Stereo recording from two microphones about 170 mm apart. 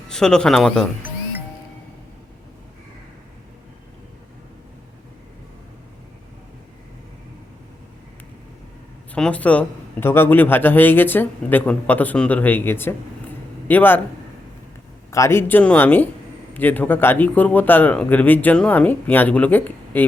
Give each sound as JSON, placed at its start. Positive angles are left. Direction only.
{"t": 0.1, "sound": "speech", "side_deg": 5}
{"t": 9.1, "sound": "a man's voice", "side_deg": 5}
{"t": 15.1, "sound": "a man's voice", "side_deg": 15}